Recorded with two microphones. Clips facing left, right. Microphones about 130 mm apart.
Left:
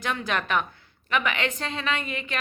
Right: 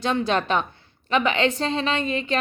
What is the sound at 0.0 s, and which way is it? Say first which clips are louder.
A woman's voice: right 6 dB; 25° right (ahead or behind).